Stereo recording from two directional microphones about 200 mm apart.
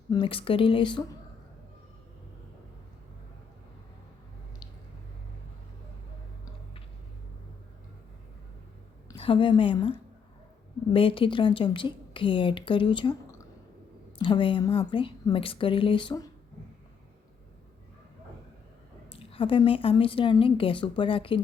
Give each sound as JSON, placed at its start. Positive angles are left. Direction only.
{"t": 0.1, "sound": "a woman's voice", "side_deg": 25}
{"t": 9.0, "sound": "a woman's voice", "side_deg": 25}
{"t": 19.1, "sound": "a woman's voice", "side_deg": 30}